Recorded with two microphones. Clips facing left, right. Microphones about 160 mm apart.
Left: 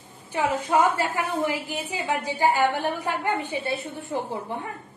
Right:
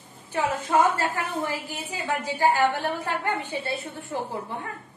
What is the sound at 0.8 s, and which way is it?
A woman's voice, 15° left (ahead or behind).